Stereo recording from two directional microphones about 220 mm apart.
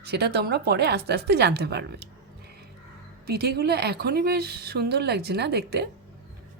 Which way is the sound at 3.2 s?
45° right (ahead or behind).